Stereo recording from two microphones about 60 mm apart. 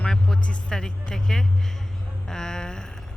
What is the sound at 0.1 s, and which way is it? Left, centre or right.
Speech, centre.